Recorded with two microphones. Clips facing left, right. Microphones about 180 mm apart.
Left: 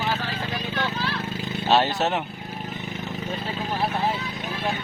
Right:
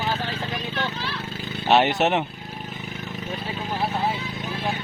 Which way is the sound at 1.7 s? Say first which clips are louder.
Right 2 dB; 20° right (ahead or behind).